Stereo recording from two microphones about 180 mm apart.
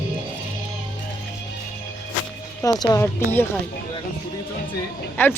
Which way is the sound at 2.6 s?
20° left (ahead or behind).